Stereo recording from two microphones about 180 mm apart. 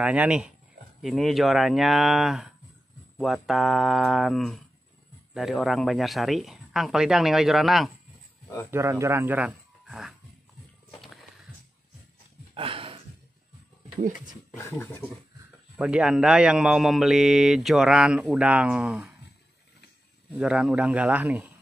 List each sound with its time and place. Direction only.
0.0 s a man's voice: 5° right (ahead or behind)
8.6 s speech: 15° right (ahead or behind)
12.5 s a sound: 30° right (ahead or behind)
14.5 s speech: 15° left (ahead or behind)
15.8 s a man's voice: 5° right (ahead or behind)
20.3 s a man's voice: 5° right (ahead or behind)